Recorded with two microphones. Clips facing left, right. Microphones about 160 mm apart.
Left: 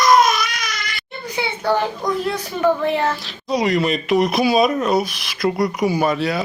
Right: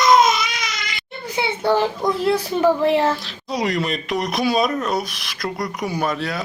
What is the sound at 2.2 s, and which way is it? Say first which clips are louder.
Speech: right 5 dB; 30° right (ahead or behind).